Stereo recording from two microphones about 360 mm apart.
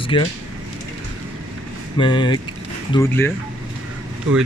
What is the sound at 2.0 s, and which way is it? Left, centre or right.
Speech, centre.